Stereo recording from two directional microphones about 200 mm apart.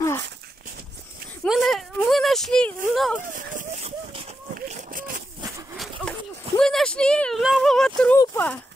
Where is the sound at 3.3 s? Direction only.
40° right (ahead or behind).